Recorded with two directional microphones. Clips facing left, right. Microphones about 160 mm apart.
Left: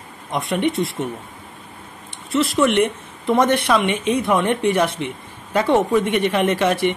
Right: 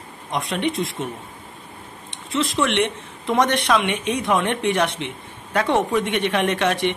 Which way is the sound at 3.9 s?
55° left (ahead or behind).